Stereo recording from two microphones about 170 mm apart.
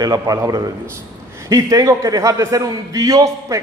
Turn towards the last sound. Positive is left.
turn(degrees=-20)  # may be behind; listen again after turning